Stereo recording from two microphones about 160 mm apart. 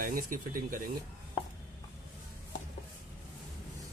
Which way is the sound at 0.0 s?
60° right (ahead or behind).